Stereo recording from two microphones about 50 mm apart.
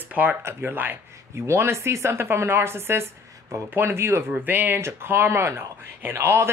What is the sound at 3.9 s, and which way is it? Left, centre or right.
Speech, right.